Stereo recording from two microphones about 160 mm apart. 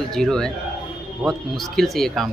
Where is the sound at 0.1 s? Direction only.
5° left (ahead or behind).